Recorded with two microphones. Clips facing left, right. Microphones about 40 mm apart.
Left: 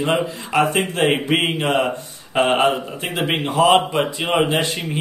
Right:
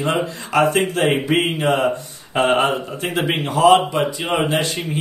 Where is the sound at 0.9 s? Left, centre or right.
Left.